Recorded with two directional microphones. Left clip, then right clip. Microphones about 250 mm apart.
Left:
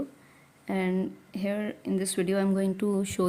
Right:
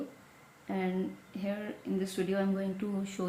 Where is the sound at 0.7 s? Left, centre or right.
Left.